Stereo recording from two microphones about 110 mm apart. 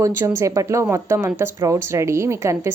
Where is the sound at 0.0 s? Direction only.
20° right (ahead or behind).